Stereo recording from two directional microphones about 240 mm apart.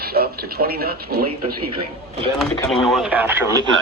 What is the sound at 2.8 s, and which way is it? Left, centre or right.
Speech, centre.